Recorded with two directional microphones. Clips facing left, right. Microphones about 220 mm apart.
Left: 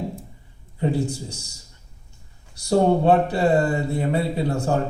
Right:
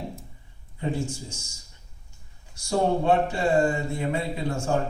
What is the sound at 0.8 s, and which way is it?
Speech, 35° left (ahead or behind).